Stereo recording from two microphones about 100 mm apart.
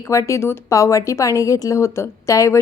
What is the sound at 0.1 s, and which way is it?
A woman's voice, 30° left (ahead or behind).